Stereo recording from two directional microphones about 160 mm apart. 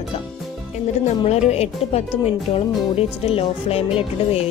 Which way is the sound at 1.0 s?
40° left (ahead or behind).